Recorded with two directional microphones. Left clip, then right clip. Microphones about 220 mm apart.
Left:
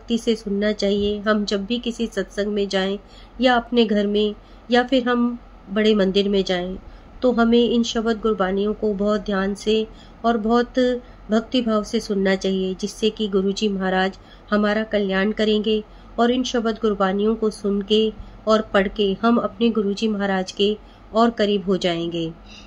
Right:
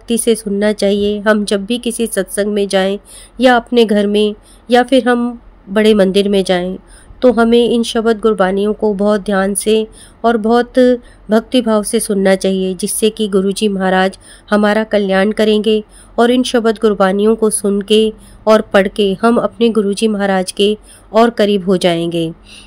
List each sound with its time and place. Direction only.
0.1 s speech: 50° right (ahead or behind)